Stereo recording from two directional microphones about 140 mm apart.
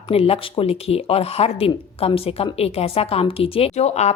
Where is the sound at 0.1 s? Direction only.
45° left (ahead or behind).